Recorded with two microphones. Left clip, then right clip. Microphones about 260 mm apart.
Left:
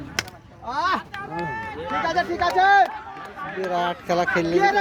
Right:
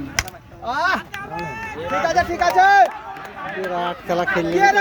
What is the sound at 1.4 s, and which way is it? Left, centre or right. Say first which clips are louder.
Speech: right 1 dB; centre.